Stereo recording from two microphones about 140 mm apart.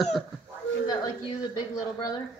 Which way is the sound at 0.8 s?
25° left (ahead or behind).